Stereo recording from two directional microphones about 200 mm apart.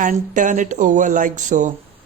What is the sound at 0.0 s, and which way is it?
Speech, 40° right (ahead or behind).